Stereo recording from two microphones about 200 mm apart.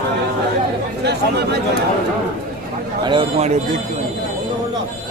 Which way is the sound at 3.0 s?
25° right (ahead or behind).